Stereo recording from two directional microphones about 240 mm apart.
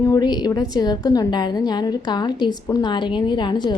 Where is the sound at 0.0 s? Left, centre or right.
Centre.